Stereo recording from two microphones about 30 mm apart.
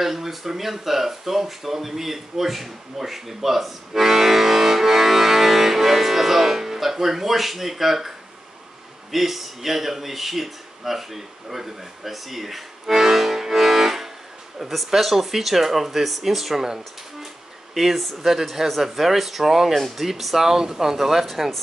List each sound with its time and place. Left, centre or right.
0.0 s speech: centre
9.1 s speech: centre
16.6 s speech: centre
17.7 s speech: centre